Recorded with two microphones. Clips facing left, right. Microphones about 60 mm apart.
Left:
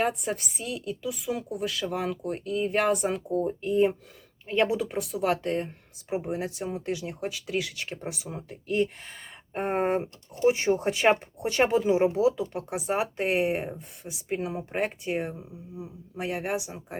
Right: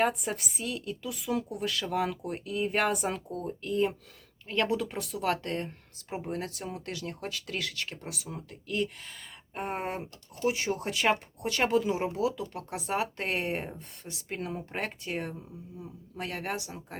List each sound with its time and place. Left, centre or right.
0.0 s a woman's voice: centre
3.2 s speech: centre